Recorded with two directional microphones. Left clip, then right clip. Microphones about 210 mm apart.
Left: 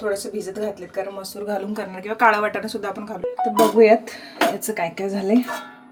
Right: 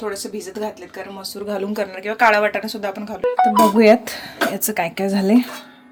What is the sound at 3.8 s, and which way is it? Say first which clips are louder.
Speech: right 1 dB; 50° right (ahead or behind).